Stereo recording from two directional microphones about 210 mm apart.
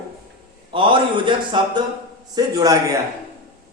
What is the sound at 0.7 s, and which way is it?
A man's voice, 25° right (ahead or behind).